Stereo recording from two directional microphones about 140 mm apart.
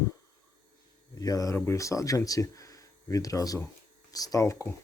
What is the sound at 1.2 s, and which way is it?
Speech, 25° left (ahead or behind).